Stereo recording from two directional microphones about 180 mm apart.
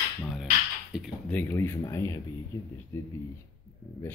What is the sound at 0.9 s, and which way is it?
Speech, 5° right (ahead or behind).